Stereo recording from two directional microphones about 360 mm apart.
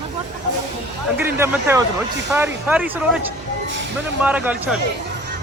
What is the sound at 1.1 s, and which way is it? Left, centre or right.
Speech, centre.